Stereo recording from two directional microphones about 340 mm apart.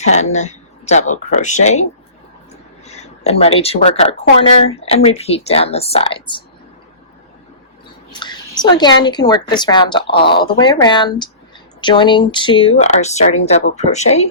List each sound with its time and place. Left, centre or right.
0.0 s speech: centre
2.8 s a woman's voice: centre
8.2 s a woman's voice: centre